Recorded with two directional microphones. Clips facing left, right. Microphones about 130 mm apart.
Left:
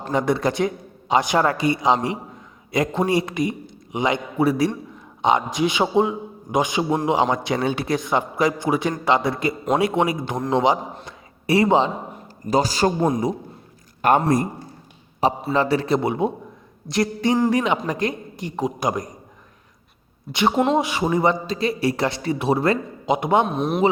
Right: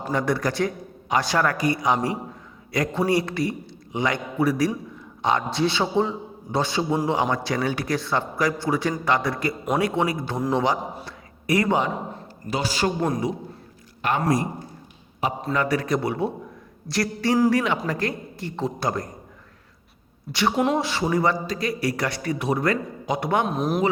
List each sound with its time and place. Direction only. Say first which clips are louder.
0.1 s a man's voice: left 3 dB; 20° left (ahead or behind)
11.0 s a sound: left 2 dB; 25° left (ahead or behind)
12.5 s a man's voice: left 6 dB; 40° left (ahead or behind)
13.0 s a man's voice: left 4 dB; 20° left (ahead or behind)
14.0 s a man's voice: left 7 dB; 50° left (ahead or behind)
15.2 s a man's voice: left 4 dB; 35° left (ahead or behind); by 19.1 s 15° left (ahead or behind)
20.3 s a man's voice: left 3 dB; 20° left (ahead or behind)
23.5 s speech: left 1 dB; centre (ahead or behind)